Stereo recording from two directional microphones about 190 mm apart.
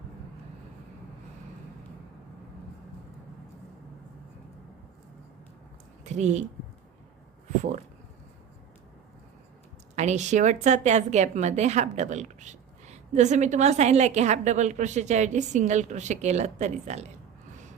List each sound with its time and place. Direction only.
6.1 s speech: 40° right (ahead or behind)
9.9 s a woman's voice: 35° right (ahead or behind)